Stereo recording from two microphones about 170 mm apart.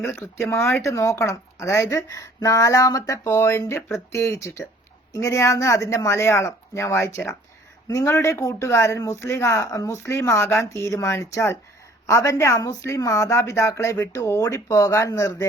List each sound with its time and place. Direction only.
0.4 s speech: 15° left (ahead or behind)